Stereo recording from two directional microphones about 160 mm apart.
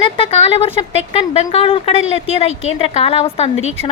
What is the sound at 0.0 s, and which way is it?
A woman's voice, 35° left (ahead or behind).